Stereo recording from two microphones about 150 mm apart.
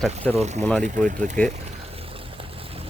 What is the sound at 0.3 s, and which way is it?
Speech, 50° right (ahead or behind).